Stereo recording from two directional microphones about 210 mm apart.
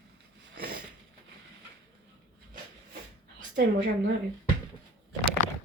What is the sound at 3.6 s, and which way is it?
Speech, 55° right (ahead or behind).